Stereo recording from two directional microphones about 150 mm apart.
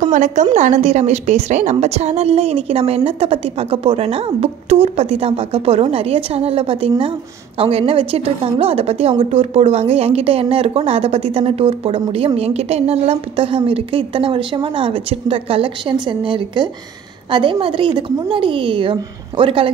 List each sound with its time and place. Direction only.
0.0 s a woman's voice: 55° right (ahead or behind); by 19.7 s 35° right (ahead or behind)